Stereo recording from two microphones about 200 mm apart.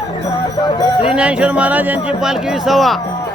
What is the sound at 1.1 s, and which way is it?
Speech, 5° right (ahead or behind).